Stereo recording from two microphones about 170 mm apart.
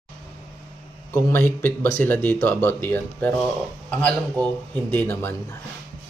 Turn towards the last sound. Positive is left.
turn(degrees=10)  # may be behind; listen again after turning